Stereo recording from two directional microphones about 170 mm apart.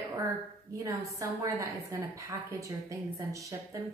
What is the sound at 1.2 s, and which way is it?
A woman's voice, 20° right (ahead or behind).